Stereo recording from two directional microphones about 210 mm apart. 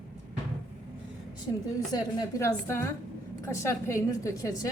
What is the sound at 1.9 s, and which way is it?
A woman's voice, 15° left (ahead or behind).